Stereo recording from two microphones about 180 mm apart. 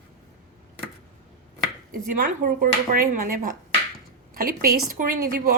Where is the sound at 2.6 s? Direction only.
50° right (ahead or behind).